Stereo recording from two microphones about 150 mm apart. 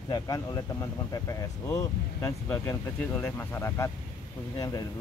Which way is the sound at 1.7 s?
20° left (ahead or behind).